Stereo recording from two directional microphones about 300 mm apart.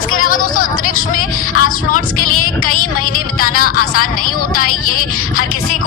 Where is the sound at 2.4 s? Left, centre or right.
Left.